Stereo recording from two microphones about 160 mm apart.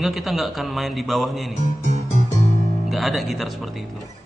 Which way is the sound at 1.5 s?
45° right (ahead or behind).